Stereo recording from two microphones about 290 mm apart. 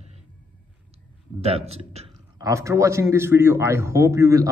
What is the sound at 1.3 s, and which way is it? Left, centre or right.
A man's voice, right.